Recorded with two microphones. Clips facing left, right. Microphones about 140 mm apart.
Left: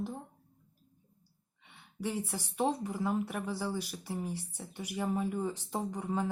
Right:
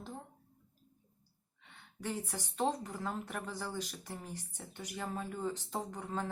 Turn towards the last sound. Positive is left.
turn(degrees=10)  # may be behind; listen again after turning